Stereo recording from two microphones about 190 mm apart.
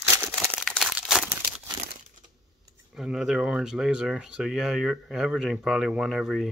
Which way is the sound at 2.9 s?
Centre (ahead or behind).